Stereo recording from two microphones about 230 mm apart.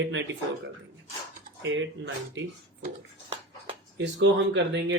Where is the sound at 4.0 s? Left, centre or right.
Right.